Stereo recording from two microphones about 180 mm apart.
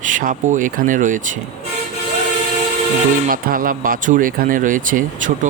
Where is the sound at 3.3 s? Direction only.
50° right (ahead or behind).